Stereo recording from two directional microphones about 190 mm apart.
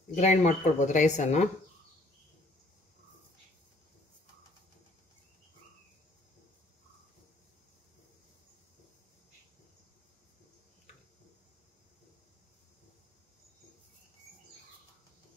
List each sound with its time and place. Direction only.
0.1 s speech: 40° left (ahead or behind)